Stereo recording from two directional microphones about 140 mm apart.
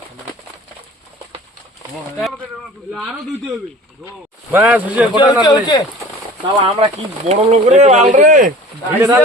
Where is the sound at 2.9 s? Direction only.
5° right (ahead or behind).